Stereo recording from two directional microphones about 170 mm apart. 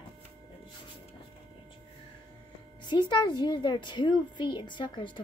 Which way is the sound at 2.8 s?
25° left (ahead or behind).